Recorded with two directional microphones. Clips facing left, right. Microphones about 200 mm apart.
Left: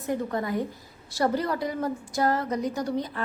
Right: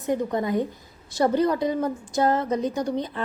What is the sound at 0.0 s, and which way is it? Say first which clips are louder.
A woman's voice: right 4 dB; 20° right (ahead or behind).